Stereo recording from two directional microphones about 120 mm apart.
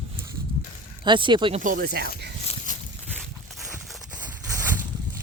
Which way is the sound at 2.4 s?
90° left.